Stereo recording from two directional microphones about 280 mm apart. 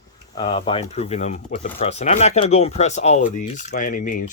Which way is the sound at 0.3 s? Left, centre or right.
Centre.